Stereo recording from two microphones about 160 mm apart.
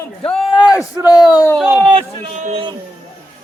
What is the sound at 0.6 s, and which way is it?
Speech, 25° left (ahead or behind).